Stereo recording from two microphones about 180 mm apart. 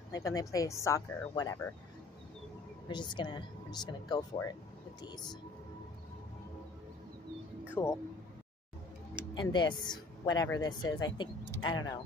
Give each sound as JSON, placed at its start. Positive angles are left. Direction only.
{"t": 0.1, "sound": "speech", "side_deg": 20}
{"t": 2.9, "sound": "speech", "side_deg": 25}
{"t": 7.7, "sound": "speech", "side_deg": 15}
{"t": 9.3, "sound": "speech", "side_deg": 25}